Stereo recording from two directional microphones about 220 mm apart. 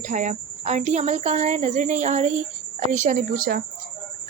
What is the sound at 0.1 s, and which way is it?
Speech, 35° right (ahead or behind).